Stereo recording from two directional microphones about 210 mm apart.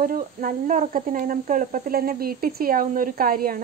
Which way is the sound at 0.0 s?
40° right (ahead or behind).